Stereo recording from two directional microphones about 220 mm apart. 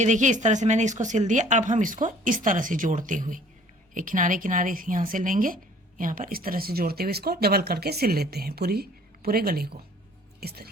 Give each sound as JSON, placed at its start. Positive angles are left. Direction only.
{"t": 0.0, "sound": "speech", "side_deg": -35}